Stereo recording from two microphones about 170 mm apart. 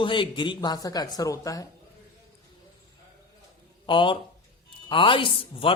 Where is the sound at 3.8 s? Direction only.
30° left (ahead or behind).